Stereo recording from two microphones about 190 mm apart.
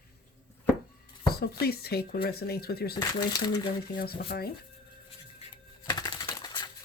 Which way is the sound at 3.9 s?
55° left (ahead or behind).